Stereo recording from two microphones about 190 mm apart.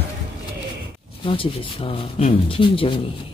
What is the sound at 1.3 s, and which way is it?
Speech, 30° left (ahead or behind).